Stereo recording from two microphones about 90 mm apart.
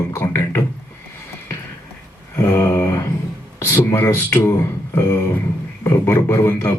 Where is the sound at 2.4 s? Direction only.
30° left (ahead or behind).